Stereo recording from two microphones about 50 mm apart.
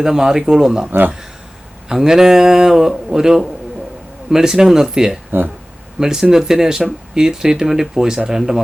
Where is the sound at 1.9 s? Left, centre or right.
Centre.